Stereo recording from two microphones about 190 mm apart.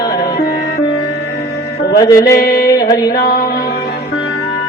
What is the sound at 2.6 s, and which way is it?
Music, 20° left (ahead or behind).